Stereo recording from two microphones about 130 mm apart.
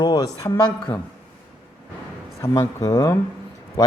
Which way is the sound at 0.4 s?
20° left (ahead or behind).